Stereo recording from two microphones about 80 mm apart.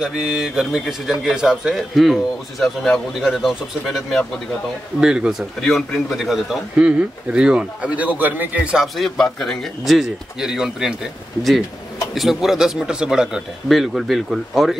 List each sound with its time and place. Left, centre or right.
0.0 s a man's voice: centre
3.2 s speech: centre
5.0 s a man's voice: centre
5.6 s speech: centre
6.8 s a man's voice: centre
8.7 s speech: centre
12.1 s speech: centre